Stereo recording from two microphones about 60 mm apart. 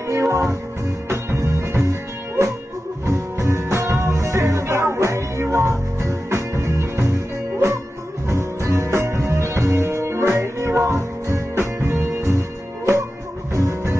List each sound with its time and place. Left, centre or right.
0.1 s music: right
8.3 s music: right